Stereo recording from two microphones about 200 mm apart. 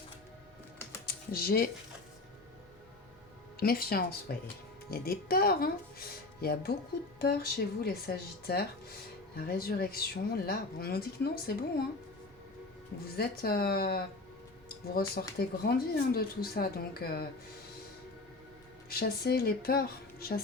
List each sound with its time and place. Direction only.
1.0 s typing: 50° left (ahead or behind)
3.6 s speech: 50° left (ahead or behind)
13.1 s speech: 50° left (ahead or behind)
18.9 s speech: 50° left (ahead or behind)